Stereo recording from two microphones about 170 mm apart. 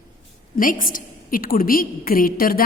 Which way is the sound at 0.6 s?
55° left (ahead or behind).